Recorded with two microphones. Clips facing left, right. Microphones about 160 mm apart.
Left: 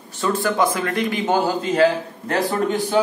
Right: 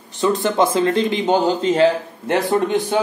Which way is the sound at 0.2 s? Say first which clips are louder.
Right 3 dB; 20° right (ahead or behind).